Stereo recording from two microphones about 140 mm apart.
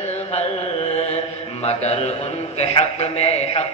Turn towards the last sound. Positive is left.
turn(degrees=50)  # may be behind; listen again after turning